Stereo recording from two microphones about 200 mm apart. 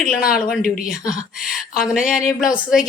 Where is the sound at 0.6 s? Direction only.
45° left (ahead or behind).